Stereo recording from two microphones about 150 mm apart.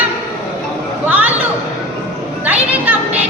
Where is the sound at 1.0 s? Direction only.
10° right (ahead or behind).